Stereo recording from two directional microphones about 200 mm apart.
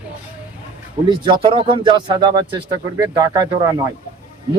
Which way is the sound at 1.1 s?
25° right (ahead or behind).